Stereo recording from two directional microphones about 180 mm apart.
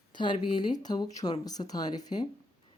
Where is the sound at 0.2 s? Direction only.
25° left (ahead or behind).